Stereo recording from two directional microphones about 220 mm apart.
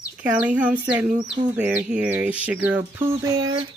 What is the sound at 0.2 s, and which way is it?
Speech, 5° right (ahead or behind).